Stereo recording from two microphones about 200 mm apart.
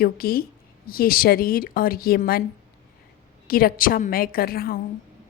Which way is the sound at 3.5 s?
45° left (ahead or behind).